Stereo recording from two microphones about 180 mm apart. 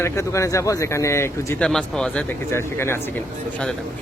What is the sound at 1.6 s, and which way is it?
Speech, 5° left (ahead or behind).